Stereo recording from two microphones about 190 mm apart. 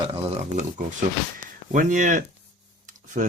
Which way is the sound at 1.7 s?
40° right (ahead or behind).